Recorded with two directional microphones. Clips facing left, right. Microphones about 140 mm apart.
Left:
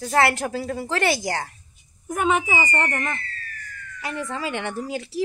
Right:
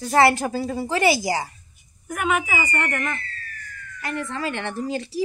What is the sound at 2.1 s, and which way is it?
A woman's voice, 30° left (ahead or behind).